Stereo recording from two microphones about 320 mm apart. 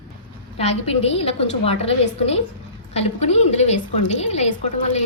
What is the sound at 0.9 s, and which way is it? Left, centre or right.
Speech, centre.